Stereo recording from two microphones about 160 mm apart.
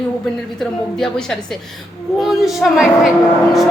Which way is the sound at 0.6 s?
Centre (ahead or behind).